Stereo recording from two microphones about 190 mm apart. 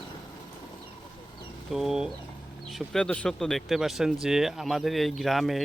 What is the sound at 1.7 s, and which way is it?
Speech, centre (ahead or behind).